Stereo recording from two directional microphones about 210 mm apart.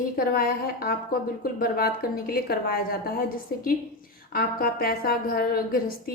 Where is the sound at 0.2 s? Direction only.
45° left (ahead or behind).